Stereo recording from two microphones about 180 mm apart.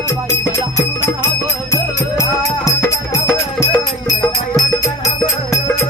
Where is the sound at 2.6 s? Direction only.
15° left (ahead or behind).